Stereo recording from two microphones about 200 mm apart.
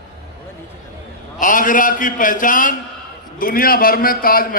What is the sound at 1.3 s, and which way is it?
A man's voice, 40° left (ahead or behind).